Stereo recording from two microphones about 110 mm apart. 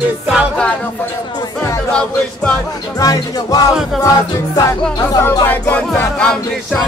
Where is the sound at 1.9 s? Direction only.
10° left (ahead or behind).